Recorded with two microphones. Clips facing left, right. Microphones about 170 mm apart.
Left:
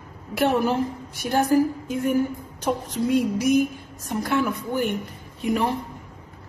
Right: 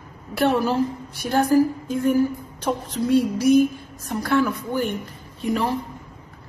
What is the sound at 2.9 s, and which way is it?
A woman's voice, 15° left (ahead or behind).